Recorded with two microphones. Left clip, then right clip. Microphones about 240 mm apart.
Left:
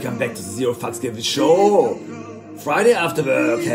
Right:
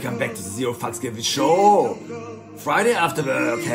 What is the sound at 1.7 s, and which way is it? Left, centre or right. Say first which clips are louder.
Speech: even; centre.